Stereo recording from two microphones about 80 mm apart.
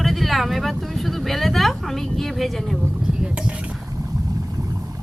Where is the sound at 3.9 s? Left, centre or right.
Right.